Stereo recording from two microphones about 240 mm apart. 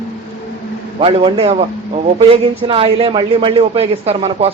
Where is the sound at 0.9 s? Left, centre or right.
Right.